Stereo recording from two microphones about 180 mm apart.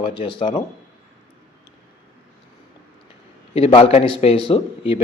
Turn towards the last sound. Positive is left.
turn(degrees=30)  # may be behind; listen again after turning